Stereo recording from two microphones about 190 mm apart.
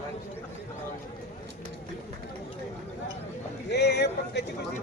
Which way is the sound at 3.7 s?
60° left (ahead or behind).